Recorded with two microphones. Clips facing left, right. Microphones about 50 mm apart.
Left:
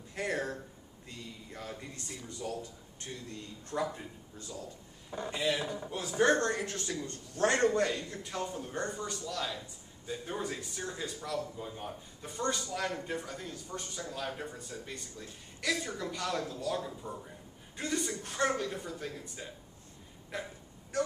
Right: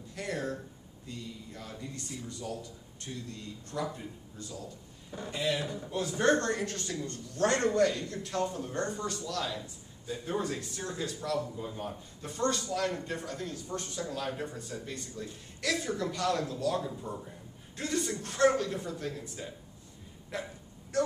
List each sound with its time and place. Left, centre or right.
0.1 s a sound: left
1.0 s a man's voice: left
5.3 s a man's voice: centre
5.7 s a man's voice: centre
8.0 s a man's voice: centre
11.8 s a man's voice: centre
20.9 s a sound: centre